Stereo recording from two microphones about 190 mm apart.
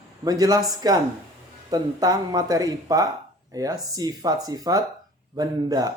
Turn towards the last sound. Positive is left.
turn(degrees=-20)  # may be behind; listen again after turning